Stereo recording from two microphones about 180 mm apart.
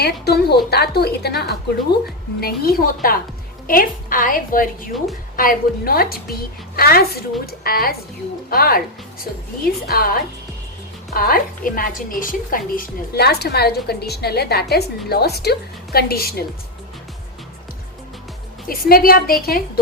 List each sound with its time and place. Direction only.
0.0 s a woman's voice: 65° left (ahead or behind)
18.7 s a woman's voice: 55° left (ahead or behind)